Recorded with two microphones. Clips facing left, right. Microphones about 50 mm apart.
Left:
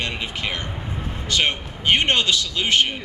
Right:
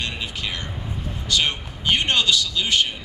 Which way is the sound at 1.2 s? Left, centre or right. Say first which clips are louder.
Left 1 dB; left.